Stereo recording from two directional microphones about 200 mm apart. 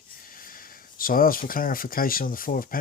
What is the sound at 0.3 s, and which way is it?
Speech, 45° left (ahead or behind).